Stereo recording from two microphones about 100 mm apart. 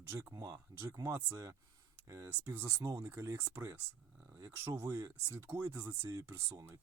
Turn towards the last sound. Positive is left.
turn(degrees=-30)  # may be behind; listen again after turning